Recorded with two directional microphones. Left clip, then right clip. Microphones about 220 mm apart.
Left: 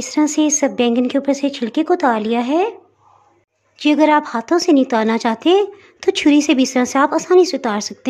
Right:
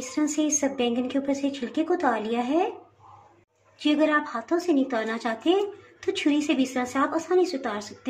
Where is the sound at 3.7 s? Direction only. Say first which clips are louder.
Left 9 dB; 50° left (ahead or behind).